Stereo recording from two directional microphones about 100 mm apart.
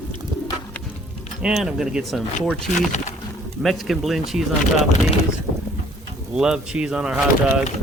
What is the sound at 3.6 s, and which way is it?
Speech, centre (ahead or behind).